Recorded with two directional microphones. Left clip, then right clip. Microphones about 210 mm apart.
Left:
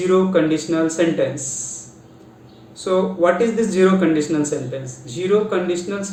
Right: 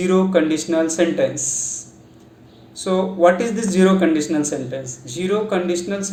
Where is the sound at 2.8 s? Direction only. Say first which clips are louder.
Right 2 dB; 50° right (ahead or behind).